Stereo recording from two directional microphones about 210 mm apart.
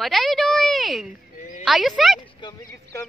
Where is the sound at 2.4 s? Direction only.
15° left (ahead or behind).